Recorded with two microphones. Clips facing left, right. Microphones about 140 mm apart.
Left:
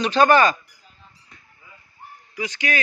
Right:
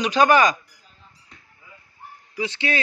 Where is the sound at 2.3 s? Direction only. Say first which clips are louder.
Right 1 dB; 30° right (ahead or behind).